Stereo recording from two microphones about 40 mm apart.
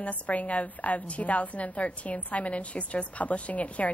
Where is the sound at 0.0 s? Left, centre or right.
Left.